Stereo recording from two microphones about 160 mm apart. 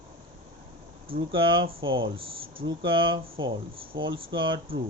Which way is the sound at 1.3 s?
30° right (ahead or behind).